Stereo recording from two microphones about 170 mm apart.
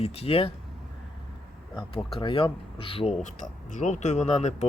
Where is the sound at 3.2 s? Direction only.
45° left (ahead or behind).